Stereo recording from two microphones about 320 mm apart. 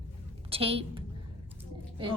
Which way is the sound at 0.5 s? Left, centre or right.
Centre.